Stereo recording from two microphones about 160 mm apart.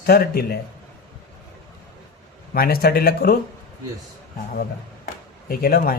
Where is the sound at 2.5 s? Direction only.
70° left (ahead or behind).